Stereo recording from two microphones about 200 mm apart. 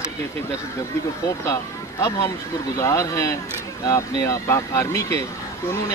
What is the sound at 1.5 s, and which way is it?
Speech, 15° left (ahead or behind).